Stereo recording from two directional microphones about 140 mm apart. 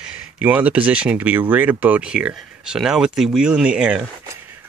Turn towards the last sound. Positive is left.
turn(degrees=-5)  # may be behind; listen again after turning